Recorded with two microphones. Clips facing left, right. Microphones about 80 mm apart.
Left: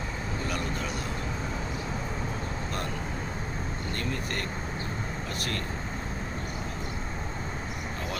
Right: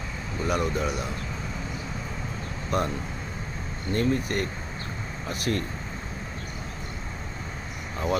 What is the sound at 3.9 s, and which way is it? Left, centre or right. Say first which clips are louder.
Speech: right 10 dB; centre.